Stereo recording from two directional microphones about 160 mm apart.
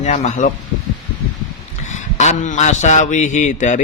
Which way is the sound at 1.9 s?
45° left (ahead or behind).